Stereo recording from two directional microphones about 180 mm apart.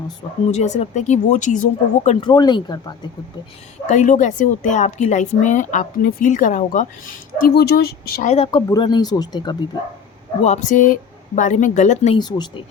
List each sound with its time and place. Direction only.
0.5 s speech: 40° left (ahead or behind)
2.2 s speech: 25° left (ahead or behind)
3.8 s a woman's voice: 45° left (ahead or behind); by 8.3 s 60° left (ahead or behind)
8.3 s speech: 30° left (ahead or behind)
10.4 s a woman's voice: 40° left (ahead or behind)
12.1 s speech: 25° left (ahead or behind)